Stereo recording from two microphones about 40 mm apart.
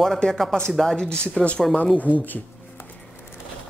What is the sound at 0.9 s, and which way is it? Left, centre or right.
Speech, centre.